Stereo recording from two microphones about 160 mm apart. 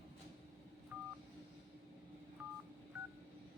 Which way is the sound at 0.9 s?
10° right (ahead or behind).